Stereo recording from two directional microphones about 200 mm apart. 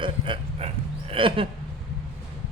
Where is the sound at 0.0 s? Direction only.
30° right (ahead or behind).